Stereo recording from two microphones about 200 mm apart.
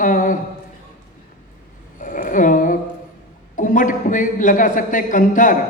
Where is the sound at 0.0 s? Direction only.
40° left (ahead or behind).